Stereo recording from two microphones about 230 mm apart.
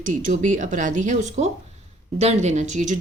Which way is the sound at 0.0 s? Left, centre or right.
Right.